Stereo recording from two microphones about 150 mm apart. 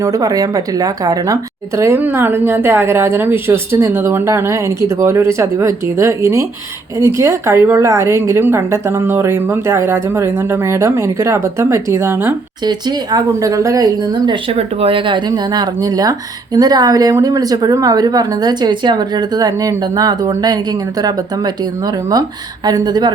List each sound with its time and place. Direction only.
0.0 s a woman's voice: 25° right (ahead or behind)